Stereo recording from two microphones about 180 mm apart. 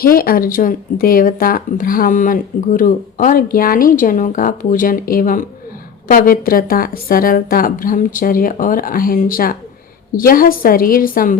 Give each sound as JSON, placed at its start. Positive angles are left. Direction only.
{"t": 0.0, "sound": "speech", "side_deg": 55}